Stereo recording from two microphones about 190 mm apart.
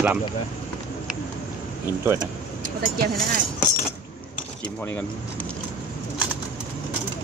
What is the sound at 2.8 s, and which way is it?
Speech, 50° right (ahead or behind).